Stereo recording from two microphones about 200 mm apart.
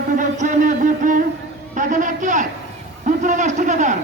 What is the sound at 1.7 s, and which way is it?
Speech, 40° right (ahead or behind).